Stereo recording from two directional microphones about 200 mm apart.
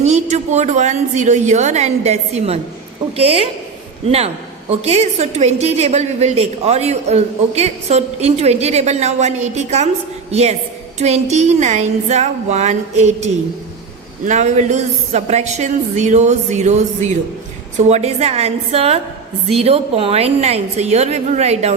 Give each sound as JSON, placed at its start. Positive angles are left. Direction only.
{"t": 0.0, "sound": "a woman's voice", "side_deg": -35}